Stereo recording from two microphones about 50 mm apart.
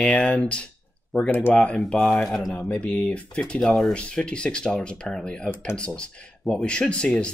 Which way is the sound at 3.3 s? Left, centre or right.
Centre.